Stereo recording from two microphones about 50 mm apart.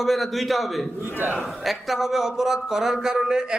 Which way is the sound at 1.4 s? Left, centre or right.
Centre.